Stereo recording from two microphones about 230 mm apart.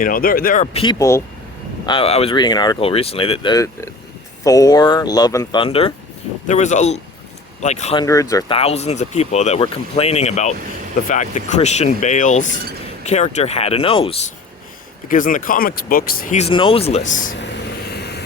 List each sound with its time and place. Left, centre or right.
0.0 s speech: left; by 1.2 s centre
1.9 s speech: left
8.0 s speech: centre
8.5 s speech: left
15.1 s speech: left
17.9 s vehicle: left